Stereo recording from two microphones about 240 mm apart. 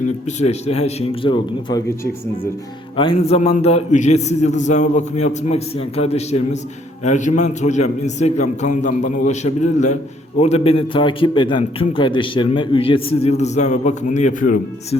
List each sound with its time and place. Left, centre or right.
0.3 s a man's voice: left
2.9 s a man's voice: left